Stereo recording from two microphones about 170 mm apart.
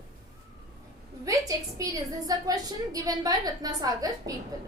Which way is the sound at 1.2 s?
20° right (ahead or behind).